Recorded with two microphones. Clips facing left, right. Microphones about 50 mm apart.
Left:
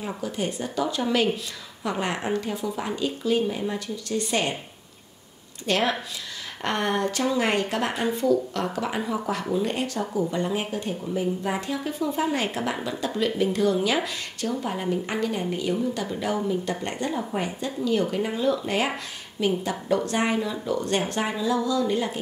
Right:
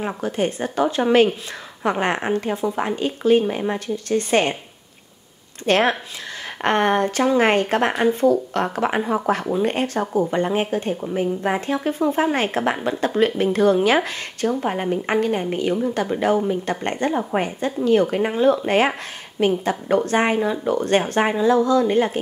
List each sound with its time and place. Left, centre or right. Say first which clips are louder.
0.0 s speech: right 6 dB; right
5.7 s speech: right 6 dB; right